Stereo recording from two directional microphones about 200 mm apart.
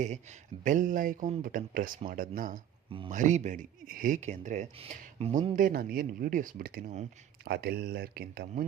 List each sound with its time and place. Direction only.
0.0 s speech: 35° right (ahead or behind)